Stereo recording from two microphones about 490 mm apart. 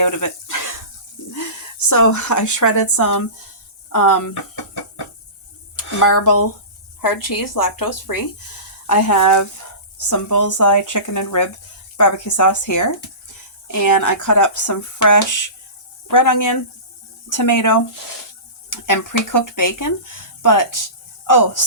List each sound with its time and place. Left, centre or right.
0.0 s a sound: left
1.3 s speech: left
6.0 s speech: left